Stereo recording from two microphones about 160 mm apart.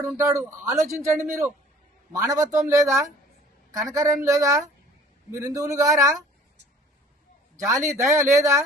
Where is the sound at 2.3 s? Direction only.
20° right (ahead or behind).